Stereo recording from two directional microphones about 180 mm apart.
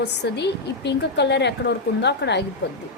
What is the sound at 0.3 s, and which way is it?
A woman's voice, 70° left (ahead or behind).